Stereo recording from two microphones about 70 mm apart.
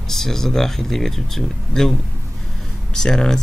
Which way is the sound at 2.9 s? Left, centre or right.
Centre.